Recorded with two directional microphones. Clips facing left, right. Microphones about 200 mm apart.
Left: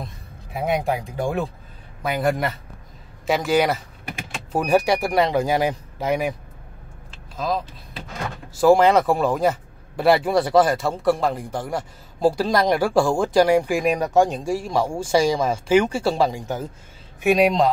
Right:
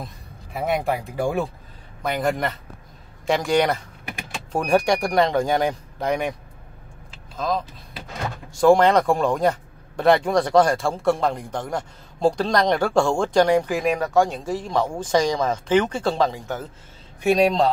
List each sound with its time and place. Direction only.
0.0 s music: centre (ahead or behind)
0.8 s speech: 5° right (ahead or behind)
7.3 s speech: 5° left (ahead or behind)